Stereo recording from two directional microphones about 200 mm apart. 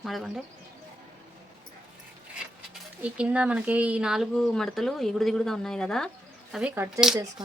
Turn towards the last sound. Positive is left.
turn(degrees=-5)  # may be behind; listen again after turning